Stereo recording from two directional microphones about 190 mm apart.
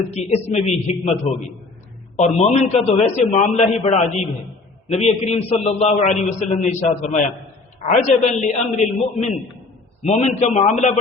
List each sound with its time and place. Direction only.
0.1 s a man's voice: 35° left (ahead or behind)
2.1 s a man's voice: 35° left (ahead or behind)
7.8 s a man's voice: 35° left (ahead or behind)